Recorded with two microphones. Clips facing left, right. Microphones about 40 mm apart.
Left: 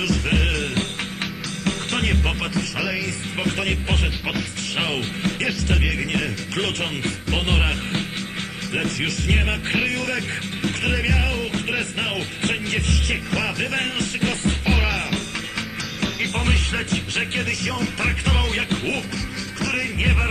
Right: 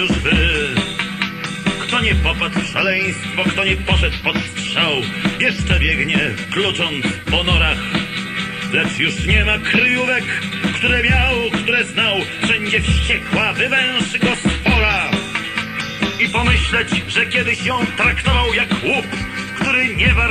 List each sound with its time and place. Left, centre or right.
0.0 s music: right